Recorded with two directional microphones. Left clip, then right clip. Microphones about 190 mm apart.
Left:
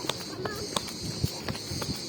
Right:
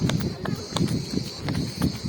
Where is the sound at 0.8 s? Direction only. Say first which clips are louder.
Right 5 dB; 35° right (ahead or behind).